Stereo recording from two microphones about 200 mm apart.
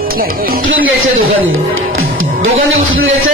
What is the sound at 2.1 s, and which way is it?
Music, 80° right.